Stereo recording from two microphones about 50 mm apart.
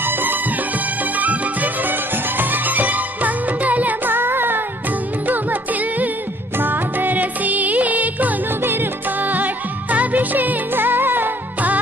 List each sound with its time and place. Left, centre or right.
0.0 s music: right
5.2 s music: right
8.6 s music: right